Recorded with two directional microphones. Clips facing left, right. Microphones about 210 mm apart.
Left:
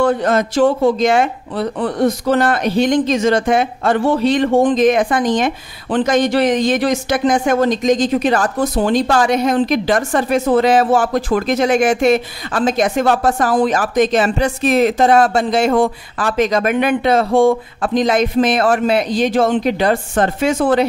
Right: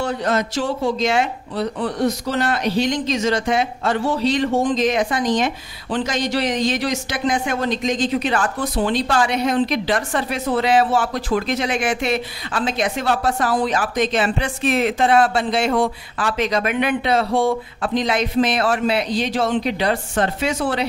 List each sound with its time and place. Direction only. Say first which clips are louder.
0.0 s speech: left 6 dB; 50° left (ahead or behind)